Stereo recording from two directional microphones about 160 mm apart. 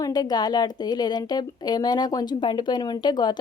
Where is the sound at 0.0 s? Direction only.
25° left (ahead or behind).